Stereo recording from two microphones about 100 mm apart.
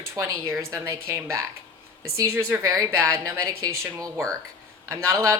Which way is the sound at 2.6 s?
35° right (ahead or behind).